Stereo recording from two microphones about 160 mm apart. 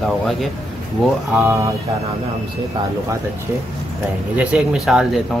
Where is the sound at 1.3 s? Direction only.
15° right (ahead or behind).